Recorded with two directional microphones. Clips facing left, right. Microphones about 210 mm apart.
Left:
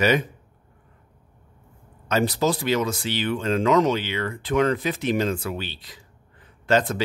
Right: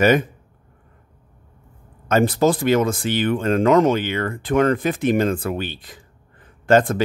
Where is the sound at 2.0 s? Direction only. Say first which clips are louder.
Right 5 dB; 50° right (ahead or behind).